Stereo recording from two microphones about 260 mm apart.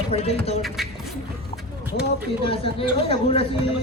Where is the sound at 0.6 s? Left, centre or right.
Centre.